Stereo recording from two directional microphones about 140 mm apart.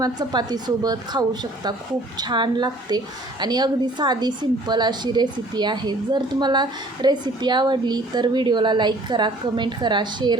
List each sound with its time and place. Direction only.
0.0 s a woman's voice: 30° right (ahead or behind)